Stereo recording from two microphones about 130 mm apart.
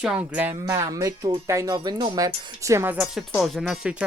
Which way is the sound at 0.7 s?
25° right (ahead or behind).